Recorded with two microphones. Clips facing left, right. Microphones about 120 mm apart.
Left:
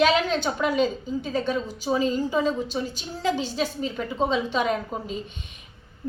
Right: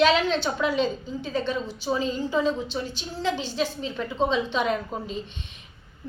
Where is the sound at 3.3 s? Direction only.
40° left (ahead or behind).